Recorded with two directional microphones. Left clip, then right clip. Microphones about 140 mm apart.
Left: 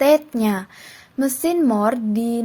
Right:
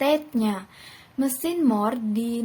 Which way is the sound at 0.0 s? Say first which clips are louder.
Left 7 dB; 50° left (ahead or behind).